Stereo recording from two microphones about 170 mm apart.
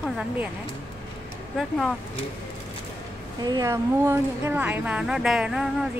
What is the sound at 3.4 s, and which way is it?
Speech, 25° right (ahead or behind).